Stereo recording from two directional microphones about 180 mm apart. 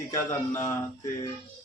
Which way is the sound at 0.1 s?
15° left (ahead or behind).